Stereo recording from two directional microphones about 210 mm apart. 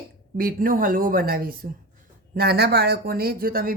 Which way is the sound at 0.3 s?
45° right (ahead or behind).